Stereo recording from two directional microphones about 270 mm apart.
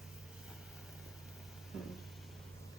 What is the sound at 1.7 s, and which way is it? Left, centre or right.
Vehicle, centre.